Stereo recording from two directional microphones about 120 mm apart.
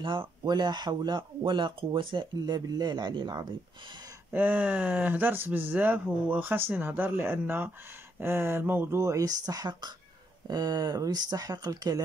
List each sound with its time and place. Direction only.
0.0 s speech: 45° right (ahead or behind)
4.3 s speech: 15° right (ahead or behind); by 12.0 s 30° right (ahead or behind)